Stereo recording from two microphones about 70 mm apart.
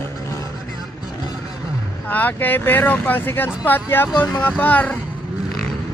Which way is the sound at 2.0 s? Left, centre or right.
Left.